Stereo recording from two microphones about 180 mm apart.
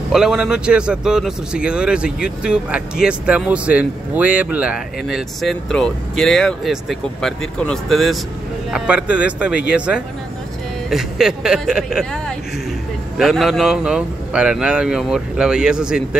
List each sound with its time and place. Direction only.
0.1 s speech: 5° right (ahead or behind)